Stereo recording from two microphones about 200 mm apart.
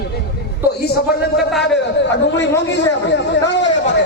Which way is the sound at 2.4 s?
60° left (ahead or behind).